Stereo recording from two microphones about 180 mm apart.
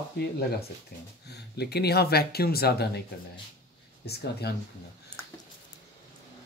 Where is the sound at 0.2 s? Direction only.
60° left (ahead or behind).